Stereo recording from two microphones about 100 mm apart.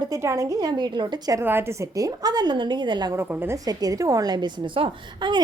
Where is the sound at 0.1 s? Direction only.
30° right (ahead or behind); by 1.4 s 50° right (ahead or behind).